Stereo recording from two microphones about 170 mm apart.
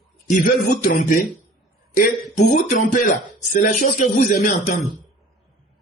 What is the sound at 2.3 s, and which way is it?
A man's voice, 50° left (ahead or behind).